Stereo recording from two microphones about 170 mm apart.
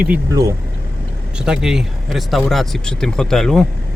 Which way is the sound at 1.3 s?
5° right (ahead or behind).